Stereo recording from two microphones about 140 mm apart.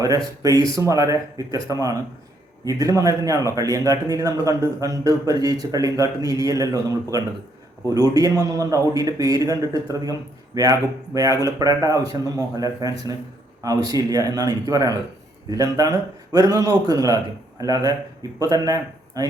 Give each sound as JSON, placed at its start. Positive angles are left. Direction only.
{"t": 0.4, "sound": "a man's voice", "side_deg": -25}